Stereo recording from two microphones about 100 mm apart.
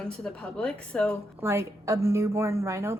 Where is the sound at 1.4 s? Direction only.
30° right (ahead or behind).